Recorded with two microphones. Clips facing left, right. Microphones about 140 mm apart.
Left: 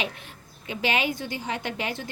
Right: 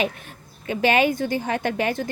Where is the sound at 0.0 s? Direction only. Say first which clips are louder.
Right 7 dB; 45° right (ahead or behind).